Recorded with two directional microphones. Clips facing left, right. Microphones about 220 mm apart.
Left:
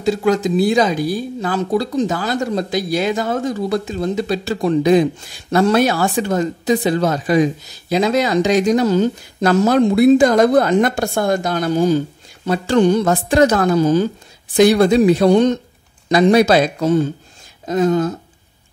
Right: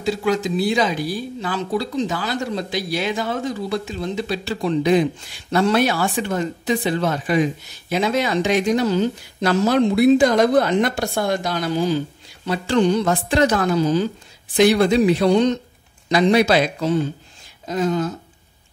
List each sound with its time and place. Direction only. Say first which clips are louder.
0.0 s speech: left 4 dB; 45° left (ahead or behind)